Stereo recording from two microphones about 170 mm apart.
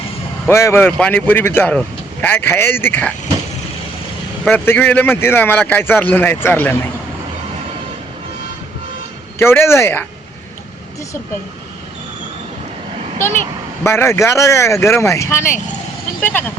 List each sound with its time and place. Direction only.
0.4 s speech: 15° left (ahead or behind)
4.4 s speech: 10° left (ahead or behind)
9.4 s speech: 15° left (ahead or behind)
13.8 s speech: 15° left (ahead or behind)